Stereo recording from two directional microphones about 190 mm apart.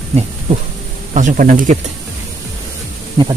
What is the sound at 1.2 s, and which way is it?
Speech, 45° right (ahead or behind).